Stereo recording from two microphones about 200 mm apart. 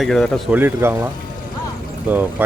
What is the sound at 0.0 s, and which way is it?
Speech, centre (ahead or behind).